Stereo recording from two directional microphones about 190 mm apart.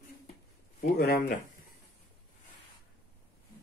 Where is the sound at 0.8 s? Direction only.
50° left (ahead or behind).